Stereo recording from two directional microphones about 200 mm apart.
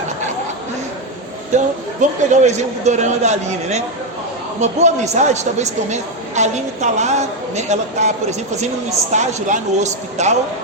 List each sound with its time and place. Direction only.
1.5 s a woman's voice: 35° right (ahead or behind)